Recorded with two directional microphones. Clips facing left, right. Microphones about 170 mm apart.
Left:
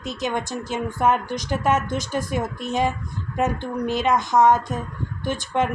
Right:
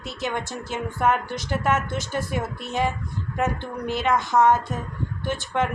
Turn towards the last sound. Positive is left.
turn(degrees=15)  # may be behind; listen again after turning